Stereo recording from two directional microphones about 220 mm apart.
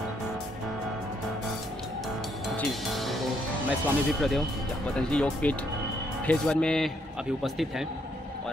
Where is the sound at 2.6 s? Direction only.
Centre (ahead or behind).